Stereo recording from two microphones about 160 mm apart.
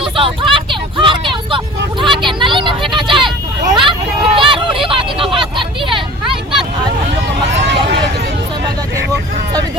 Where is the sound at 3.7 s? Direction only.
30° right (ahead or behind).